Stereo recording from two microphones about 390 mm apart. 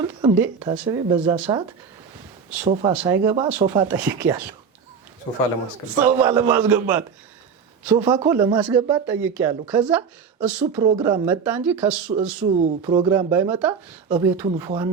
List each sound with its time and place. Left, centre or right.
0.2 s speech: centre
2.6 s speech: centre
5.3 s a man's voice: centre
6.1 s speech: centre